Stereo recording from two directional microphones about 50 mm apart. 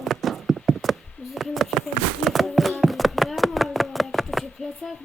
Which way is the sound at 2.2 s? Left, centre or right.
Centre.